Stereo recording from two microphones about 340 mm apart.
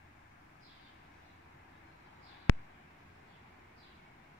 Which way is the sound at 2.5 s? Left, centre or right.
Left.